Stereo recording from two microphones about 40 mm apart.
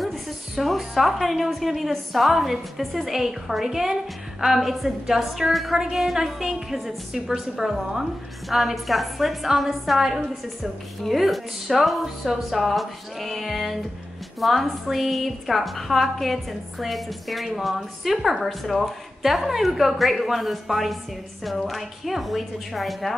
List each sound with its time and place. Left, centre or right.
0.0 s a woman's voice: centre